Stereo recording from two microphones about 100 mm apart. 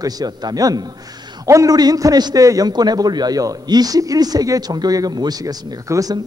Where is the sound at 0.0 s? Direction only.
40° right (ahead or behind).